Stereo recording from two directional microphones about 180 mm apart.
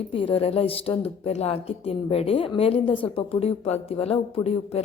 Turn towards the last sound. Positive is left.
turn(degrees=35)  # may be behind; listen again after turning